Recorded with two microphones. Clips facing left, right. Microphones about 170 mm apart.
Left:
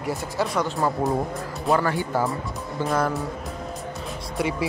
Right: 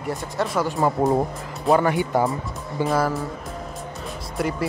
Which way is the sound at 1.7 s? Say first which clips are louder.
Right 4 dB; 20° right (ahead or behind).